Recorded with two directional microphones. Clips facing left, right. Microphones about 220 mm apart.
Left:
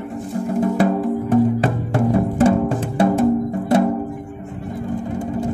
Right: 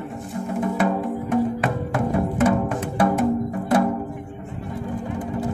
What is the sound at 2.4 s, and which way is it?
Music, 30° left (ahead or behind).